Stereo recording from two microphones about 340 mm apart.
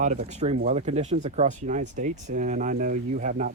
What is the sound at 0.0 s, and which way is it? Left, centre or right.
Speech, right.